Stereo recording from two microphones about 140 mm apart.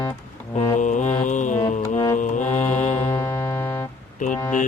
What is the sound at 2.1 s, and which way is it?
Music, 60° left (ahead or behind).